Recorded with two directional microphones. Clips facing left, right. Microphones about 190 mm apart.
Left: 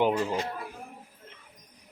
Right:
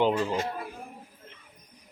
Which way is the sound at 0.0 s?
10° left (ahead or behind).